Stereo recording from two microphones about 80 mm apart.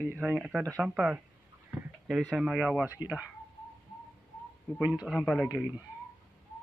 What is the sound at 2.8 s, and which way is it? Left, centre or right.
Speech, centre.